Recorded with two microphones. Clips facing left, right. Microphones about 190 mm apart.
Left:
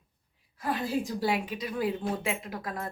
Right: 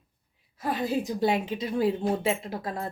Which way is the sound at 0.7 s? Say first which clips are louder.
Right 2 dB; 20° right (ahead or behind).